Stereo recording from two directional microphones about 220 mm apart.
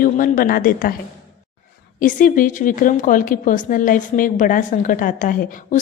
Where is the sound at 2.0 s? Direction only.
35° left (ahead or behind).